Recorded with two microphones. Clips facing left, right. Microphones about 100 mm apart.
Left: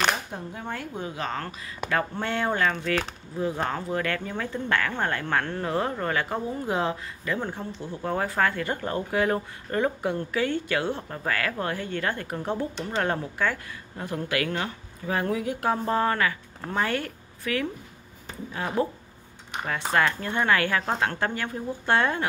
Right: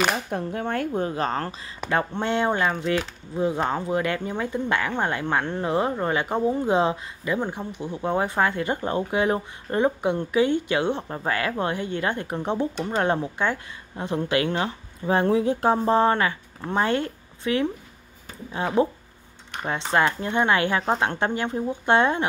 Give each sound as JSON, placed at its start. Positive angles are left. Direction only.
{"t": 0.3, "sound": "a woman's voice", "side_deg": -60}
{"t": 1.9, "sound": "speech", "side_deg": -25}
{"t": 19.9, "sound": "speech", "side_deg": -20}